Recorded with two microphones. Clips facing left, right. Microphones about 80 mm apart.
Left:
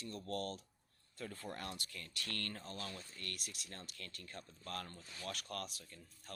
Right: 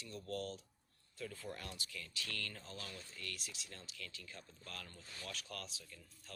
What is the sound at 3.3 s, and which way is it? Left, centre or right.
Speech, left.